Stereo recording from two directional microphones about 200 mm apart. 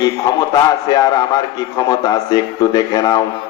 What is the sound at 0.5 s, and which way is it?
A man's voice, 20° left (ahead or behind).